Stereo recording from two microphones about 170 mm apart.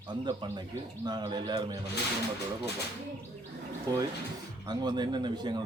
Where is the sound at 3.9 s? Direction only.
20° right (ahead or behind).